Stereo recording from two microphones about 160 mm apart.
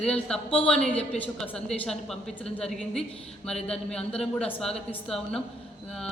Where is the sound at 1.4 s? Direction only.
5° left (ahead or behind).